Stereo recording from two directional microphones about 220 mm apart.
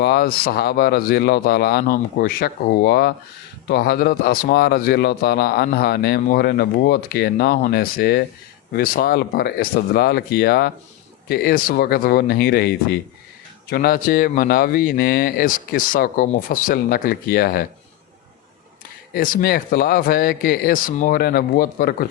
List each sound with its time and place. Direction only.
0.0 s speech: 45° left (ahead or behind)
19.1 s speech: 40° left (ahead or behind)